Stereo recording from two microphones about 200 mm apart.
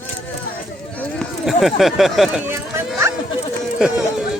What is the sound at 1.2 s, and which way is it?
Speech, centre (ahead or behind).